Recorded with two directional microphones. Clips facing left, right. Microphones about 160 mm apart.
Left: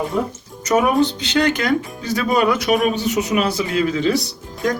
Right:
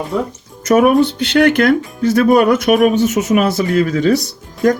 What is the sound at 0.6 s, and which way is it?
Speech, 60° right (ahead or behind).